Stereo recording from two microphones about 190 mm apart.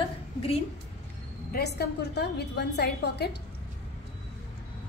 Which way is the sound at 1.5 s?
55° left (ahead or behind).